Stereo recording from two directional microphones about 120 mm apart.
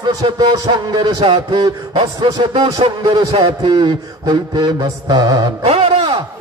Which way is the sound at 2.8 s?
50° right (ahead or behind).